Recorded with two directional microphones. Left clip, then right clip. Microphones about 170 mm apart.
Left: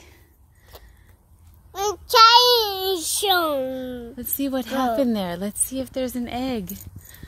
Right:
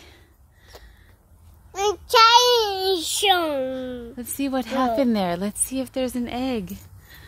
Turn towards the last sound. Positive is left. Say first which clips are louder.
# right 1 dB
turn(degrees=-5)  # may be behind; listen again after turning